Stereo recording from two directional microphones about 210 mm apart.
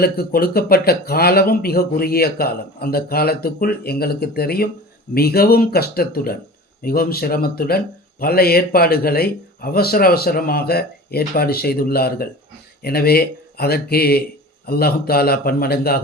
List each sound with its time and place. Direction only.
0.0 s speech: 45° left (ahead or behind)